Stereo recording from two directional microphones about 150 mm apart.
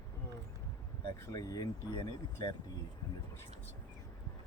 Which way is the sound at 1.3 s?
25° left (ahead or behind).